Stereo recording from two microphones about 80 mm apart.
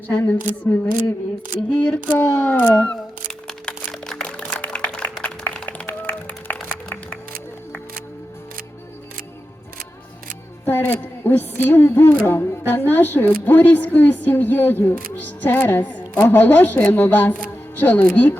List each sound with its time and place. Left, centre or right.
0.1 s a woman's voice: left
3.4 s a sound: centre
10.7 s music: left
12.2 s a woman's voice: left